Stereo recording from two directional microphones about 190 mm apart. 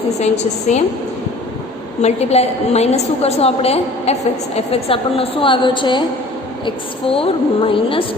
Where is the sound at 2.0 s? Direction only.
35° left (ahead or behind).